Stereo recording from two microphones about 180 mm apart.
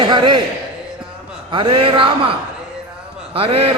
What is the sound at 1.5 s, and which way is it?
Speech, 30° right (ahead or behind).